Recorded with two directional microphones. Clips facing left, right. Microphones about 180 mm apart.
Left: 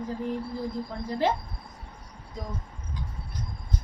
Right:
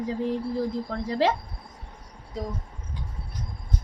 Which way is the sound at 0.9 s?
90° right.